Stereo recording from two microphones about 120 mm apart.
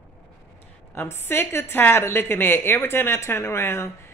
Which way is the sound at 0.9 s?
20° left (ahead or behind).